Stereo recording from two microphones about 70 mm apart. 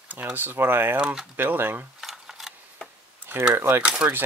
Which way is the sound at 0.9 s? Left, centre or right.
Centre.